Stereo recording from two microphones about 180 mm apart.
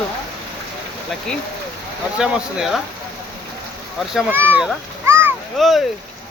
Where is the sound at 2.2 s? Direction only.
Centre (ahead or behind).